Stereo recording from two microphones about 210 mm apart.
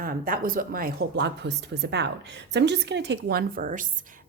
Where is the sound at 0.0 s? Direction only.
40° right (ahead or behind).